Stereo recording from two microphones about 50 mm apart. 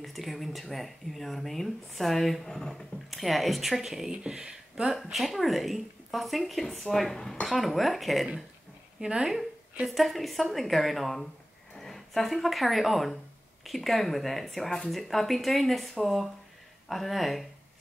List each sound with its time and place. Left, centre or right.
0.0 s speech: centre
4.8 s speech: centre
9.0 s speech: centre
9.8 s speech: centre